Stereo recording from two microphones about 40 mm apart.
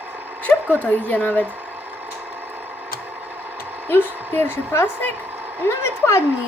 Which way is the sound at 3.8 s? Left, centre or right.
Left.